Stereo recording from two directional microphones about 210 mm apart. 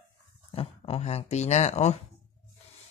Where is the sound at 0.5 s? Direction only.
30° left (ahead or behind).